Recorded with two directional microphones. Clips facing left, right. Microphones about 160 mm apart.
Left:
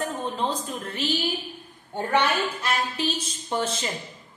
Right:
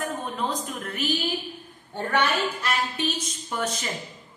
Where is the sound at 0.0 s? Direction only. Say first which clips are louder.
Left 2 dB; 30° left (ahead or behind).